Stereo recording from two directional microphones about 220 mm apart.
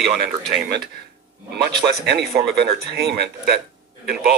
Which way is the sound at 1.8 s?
50° right (ahead or behind).